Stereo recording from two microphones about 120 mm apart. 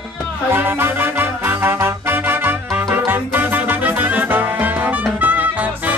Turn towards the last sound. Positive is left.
turn(degrees=-15)  # may be behind; listen again after turning